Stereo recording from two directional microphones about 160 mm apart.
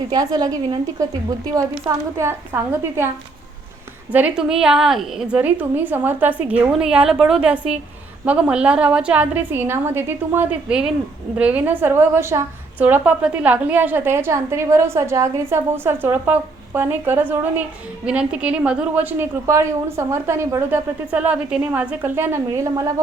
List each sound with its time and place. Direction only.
0.1 s a woman's voice: 25° right (ahead or behind)
4.1 s a woman's voice: 5° right (ahead or behind)